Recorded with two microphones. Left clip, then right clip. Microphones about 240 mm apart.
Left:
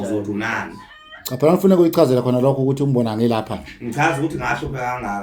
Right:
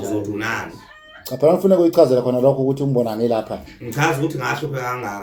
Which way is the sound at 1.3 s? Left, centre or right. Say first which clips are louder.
Right 1 dB; left.